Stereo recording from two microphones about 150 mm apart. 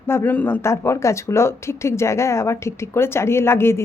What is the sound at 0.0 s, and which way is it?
Speech, 15° left (ahead or behind).